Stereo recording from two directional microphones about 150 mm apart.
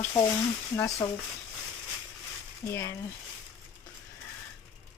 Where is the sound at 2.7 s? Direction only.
20° left (ahead or behind).